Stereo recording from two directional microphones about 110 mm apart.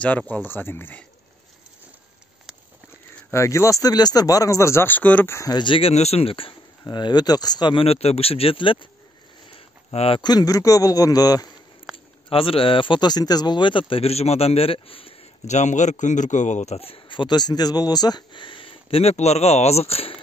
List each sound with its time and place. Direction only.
0.3 s speech: 20° left (ahead or behind)
3.3 s speech: 25° left (ahead or behind)
5.5 s speech: 45° left (ahead or behind)
6.8 s a man's voice: 40° left (ahead or behind)
7.8 s speech: 70° left (ahead or behind); by 8.8 s 50° left (ahead or behind)
9.5 s a sound: 55° left (ahead or behind)
10.2 s a man's voice: 35° left (ahead or behind)
11.9 s a sound: centre (ahead or behind)
12.3 s speech: 55° left (ahead or behind)